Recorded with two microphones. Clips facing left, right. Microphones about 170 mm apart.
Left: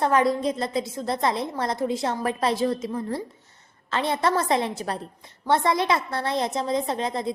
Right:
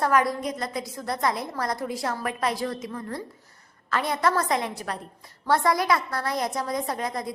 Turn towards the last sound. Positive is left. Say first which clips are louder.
# left 3 dB
turn(degrees=25)  # may be behind; listen again after turning